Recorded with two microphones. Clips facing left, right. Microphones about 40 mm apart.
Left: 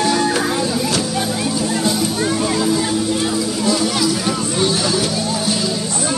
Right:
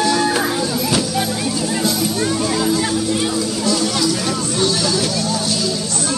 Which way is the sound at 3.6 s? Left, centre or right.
Centre.